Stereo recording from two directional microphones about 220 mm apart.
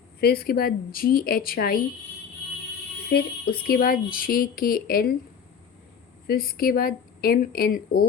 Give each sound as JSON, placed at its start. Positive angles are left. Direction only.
{"t": 0.2, "sound": "speech", "side_deg": 45}
{"t": 3.1, "sound": "speech", "side_deg": 50}
{"t": 6.2, "sound": "speech", "side_deg": 45}